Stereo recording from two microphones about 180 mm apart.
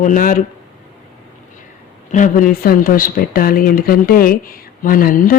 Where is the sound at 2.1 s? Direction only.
45° left (ahead or behind).